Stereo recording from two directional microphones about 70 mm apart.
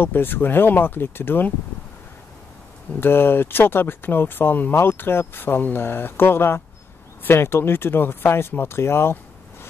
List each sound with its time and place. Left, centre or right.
0.0 s speech: left
3.0 s speech: left